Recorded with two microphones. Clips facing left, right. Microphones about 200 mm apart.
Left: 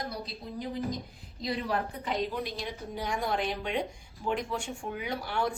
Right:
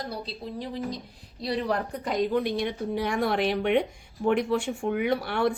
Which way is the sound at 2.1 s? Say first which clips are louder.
Right 9 dB; 60° right (ahead or behind).